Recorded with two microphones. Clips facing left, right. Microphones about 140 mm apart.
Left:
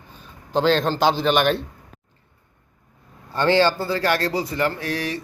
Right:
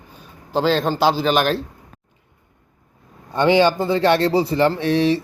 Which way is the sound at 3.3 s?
15° right (ahead or behind).